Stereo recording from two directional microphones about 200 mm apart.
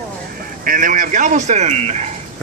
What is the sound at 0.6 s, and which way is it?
Speech, 40° right (ahead or behind).